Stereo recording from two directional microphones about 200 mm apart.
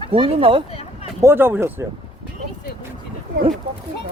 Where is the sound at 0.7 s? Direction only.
30° left (ahead or behind).